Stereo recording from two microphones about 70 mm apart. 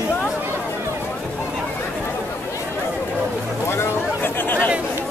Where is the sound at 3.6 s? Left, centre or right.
Left.